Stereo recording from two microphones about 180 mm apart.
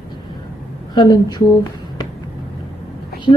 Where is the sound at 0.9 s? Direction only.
25° left (ahead or behind).